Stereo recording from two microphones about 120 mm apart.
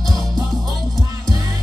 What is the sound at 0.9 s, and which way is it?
Music, 30° right (ahead or behind).